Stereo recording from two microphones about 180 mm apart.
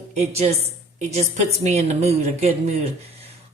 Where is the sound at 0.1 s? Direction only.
40° right (ahead or behind).